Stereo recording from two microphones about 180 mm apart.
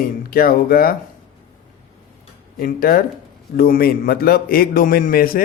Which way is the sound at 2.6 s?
50° left (ahead or behind).